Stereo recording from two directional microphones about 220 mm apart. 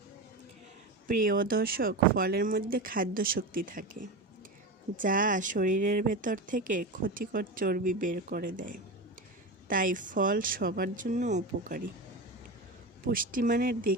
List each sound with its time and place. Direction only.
1.0 s speech: 40° right (ahead or behind)
4.9 s speech: 40° right (ahead or behind)
13.1 s speech: 40° right (ahead or behind)